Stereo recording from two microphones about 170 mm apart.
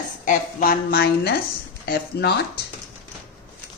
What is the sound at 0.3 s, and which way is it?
A woman's voice, 60° left (ahead or behind).